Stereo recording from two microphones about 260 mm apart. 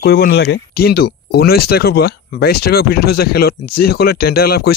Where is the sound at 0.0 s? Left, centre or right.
Left.